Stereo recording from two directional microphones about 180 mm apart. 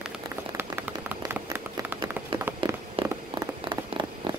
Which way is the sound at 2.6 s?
25° right (ahead or behind).